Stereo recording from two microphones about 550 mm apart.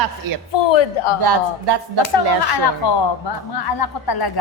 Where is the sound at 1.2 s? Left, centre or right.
Right.